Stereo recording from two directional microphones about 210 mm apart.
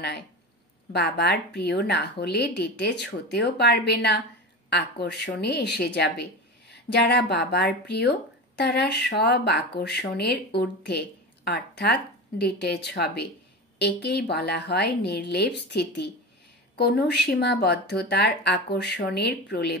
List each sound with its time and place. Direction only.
0.9 s speech: 50° left (ahead or behind)